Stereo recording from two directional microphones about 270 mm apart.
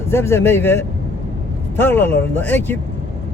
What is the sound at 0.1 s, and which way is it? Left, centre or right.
A man's voice, centre.